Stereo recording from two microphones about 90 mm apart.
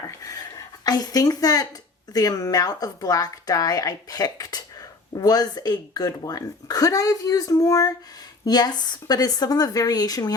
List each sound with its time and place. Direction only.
0.2 s speech: 40° left (ahead or behind)